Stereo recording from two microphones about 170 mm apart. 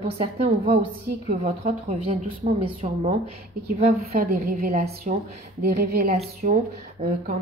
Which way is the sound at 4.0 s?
65° right (ahead or behind).